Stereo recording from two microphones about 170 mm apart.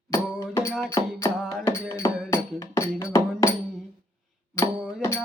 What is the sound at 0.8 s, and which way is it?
Music, 15° left (ahead or behind).